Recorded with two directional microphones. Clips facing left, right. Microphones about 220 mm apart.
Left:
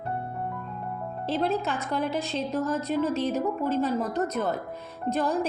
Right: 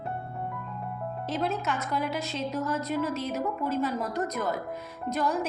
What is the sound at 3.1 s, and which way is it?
Speech, 30° left (ahead or behind).